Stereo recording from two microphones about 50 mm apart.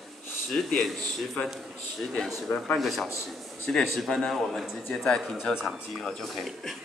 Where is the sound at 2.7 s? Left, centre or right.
Centre.